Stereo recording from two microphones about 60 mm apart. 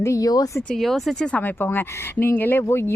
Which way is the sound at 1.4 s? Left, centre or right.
Left.